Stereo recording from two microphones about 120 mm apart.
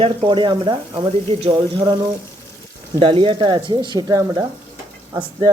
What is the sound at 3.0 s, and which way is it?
Speech, 45° right (ahead or behind).